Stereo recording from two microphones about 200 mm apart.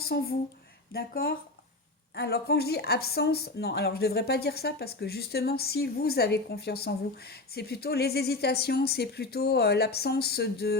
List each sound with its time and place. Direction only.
0.0 s speech: 50° left (ahead or behind)